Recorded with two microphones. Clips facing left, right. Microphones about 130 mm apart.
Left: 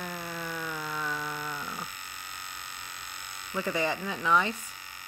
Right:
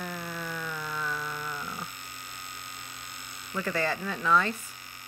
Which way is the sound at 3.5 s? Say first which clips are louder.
Even; 15° left (ahead or behind).